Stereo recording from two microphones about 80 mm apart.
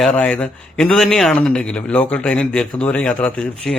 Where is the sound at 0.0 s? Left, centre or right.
Centre.